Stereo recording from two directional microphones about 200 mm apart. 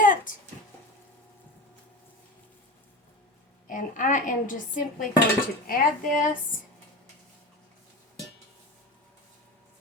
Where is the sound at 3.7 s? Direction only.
40° left (ahead or behind).